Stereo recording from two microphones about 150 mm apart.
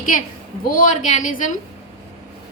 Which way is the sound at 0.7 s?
55° left (ahead or behind).